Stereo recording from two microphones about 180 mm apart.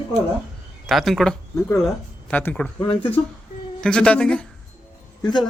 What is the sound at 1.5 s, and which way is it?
Speech, 15° left (ahead or behind).